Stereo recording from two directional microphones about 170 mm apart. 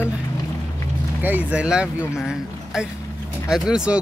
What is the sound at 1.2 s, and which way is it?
Speech, 10° right (ahead or behind).